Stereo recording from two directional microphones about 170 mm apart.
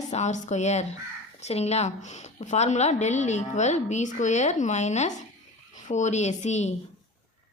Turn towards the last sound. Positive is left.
turn(degrees=40)  # may be behind; listen again after turning